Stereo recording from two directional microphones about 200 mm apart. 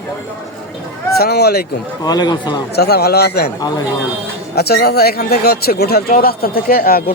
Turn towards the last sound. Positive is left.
turn(degrees=45)  # may be behind; listen again after turning